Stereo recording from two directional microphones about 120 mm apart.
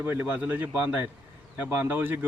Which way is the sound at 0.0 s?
15° right (ahead or behind).